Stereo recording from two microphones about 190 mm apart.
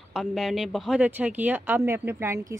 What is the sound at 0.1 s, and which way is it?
A woman's voice, centre (ahead or behind).